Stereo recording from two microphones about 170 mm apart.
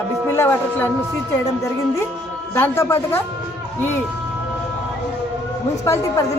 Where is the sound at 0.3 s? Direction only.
10° left (ahead or behind).